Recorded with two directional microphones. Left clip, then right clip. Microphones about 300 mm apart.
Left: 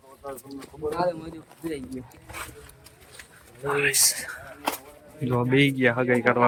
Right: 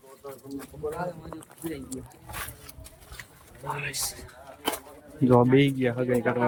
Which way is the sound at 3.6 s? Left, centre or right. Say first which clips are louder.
Left 10 dB; centre.